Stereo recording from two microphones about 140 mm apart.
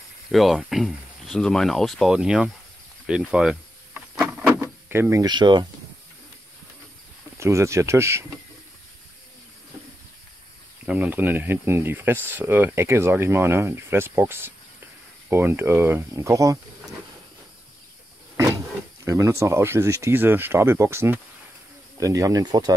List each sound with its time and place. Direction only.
0.3 s speech: centre (ahead or behind)
3.1 s insect: 5° right (ahead or behind)
4.1 s a sound: 15° right (ahead or behind)
4.6 s door: 15° right (ahead or behind)
5.2 s speech: 30° right (ahead or behind)
7.3 s speech: 20° right (ahead or behind)
10.9 s speech: 10° right (ahead or behind)
19.0 s speech: 20° right (ahead or behind)